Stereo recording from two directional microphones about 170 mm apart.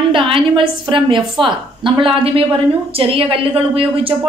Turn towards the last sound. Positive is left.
turn(degrees=-30)  # may be behind; listen again after turning